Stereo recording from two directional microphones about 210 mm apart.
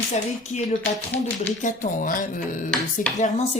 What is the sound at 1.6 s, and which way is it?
Speech, 40° left (ahead or behind).